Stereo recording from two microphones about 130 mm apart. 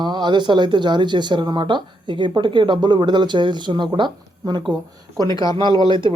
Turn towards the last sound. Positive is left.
turn(degrees=-40)  # may be behind; listen again after turning